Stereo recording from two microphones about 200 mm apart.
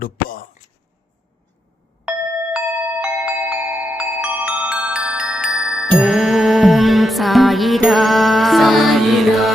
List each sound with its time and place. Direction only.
0.0 s speech: 45° left (ahead or behind)
2.0 s glockenspiel: 5° right (ahead or behind)
6.0 s music: centre (ahead or behind)